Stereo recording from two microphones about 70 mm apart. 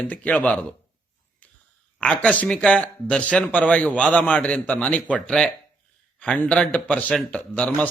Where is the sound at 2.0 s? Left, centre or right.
Centre.